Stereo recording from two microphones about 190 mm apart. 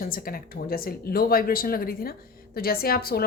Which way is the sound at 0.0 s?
50° left (ahead or behind).